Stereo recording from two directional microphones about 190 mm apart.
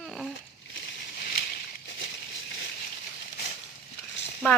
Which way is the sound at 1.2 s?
60° left (ahead or behind).